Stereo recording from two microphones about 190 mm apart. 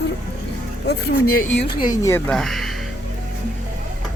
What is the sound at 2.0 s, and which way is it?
Speech, 10° left (ahead or behind).